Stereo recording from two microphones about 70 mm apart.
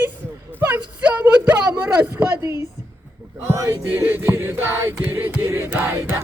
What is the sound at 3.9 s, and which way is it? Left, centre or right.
Music, right.